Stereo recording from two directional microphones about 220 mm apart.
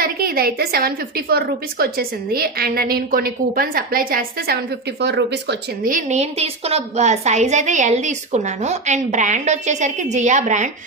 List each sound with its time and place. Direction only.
0.0 s a woman's voice: 45° right (ahead or behind)
5.9 s a woman's voice: 30° right (ahead or behind)